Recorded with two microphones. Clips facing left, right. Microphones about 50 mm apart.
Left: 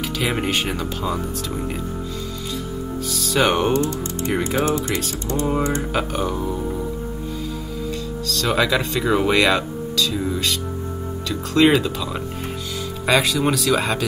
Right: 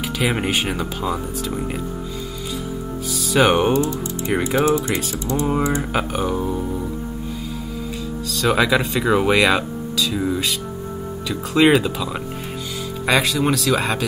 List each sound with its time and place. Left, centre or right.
0.2 s speech: centre
3.1 s speech: centre
8.3 s speech: centre